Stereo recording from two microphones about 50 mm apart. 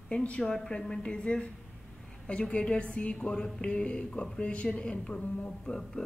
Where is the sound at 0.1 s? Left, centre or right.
Left.